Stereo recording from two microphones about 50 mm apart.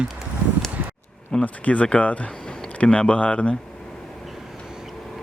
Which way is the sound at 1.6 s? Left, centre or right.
Left.